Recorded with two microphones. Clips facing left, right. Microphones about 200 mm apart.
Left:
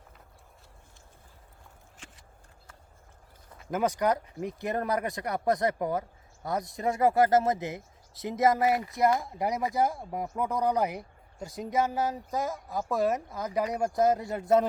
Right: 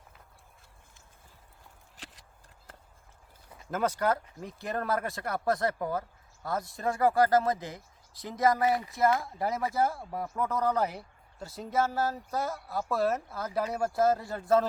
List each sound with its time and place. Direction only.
3.7 s speech: 15° left (ahead or behind)